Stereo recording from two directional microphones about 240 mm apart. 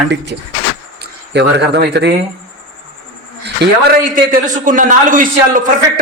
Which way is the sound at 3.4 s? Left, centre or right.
Right.